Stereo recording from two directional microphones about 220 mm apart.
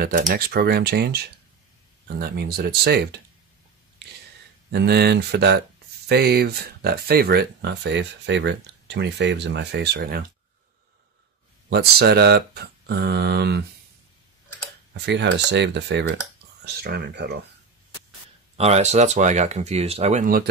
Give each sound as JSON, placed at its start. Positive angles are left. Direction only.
{"t": 0.0, "sound": "speech", "side_deg": -40}
{"t": 4.0, "sound": "a sound", "side_deg": -50}
{"t": 4.7, "sound": "speech", "side_deg": -50}
{"t": 11.7, "sound": "speech", "side_deg": -45}
{"t": 15.0, "sound": "speech", "side_deg": -50}
{"t": 18.6, "sound": "speech", "side_deg": -30}